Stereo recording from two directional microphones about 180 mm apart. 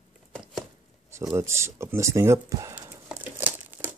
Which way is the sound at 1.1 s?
15° right (ahead or behind).